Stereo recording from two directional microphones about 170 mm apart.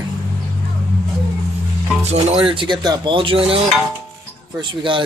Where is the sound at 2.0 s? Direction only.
40° right (ahead or behind).